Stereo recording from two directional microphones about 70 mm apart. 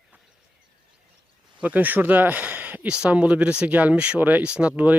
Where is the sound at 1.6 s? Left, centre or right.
Right.